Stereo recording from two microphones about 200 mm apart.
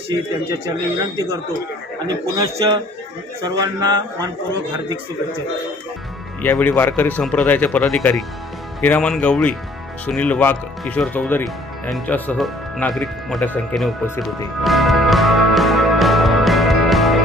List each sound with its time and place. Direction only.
0.5 s speech: 20° right (ahead or behind)
2.4 s speech: 20° right (ahead or behind)
6.4 s speech: 10° left (ahead or behind)